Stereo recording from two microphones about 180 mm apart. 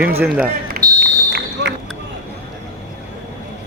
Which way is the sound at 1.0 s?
65° right (ahead or behind).